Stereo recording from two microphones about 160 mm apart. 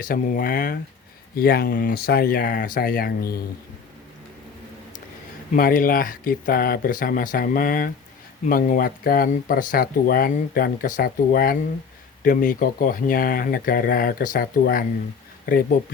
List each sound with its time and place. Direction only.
0.0 s speech: 60° left (ahead or behind)
5.5 s speech: 60° left (ahead or behind)